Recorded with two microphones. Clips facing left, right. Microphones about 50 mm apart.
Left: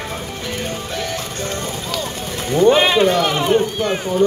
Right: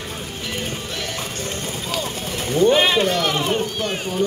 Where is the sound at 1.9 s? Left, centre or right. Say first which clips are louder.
Left 1 dB; centre.